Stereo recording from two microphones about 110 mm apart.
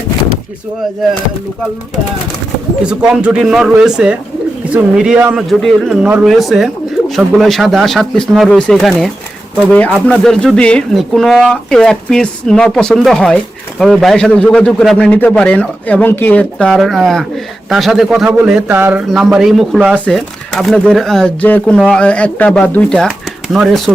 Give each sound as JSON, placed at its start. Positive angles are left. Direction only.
{"t": 2.8, "sound": "speech", "side_deg": -5}
{"t": 10.1, "sound": "speech", "side_deg": 5}
{"t": 19.1, "sound": "speech", "side_deg": -5}
{"t": 21.4, "sound": "speech", "side_deg": 15}
{"t": 23.0, "sound": "speech", "side_deg": 0}